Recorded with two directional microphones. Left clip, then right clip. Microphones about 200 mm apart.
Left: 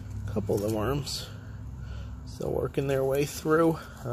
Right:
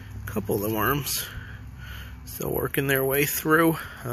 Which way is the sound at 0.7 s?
15° right (ahead or behind).